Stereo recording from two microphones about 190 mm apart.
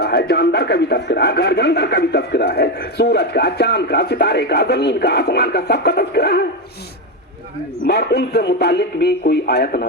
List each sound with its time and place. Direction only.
0.0 s speech: 55° left (ahead or behind)
7.9 s speech: 60° left (ahead or behind)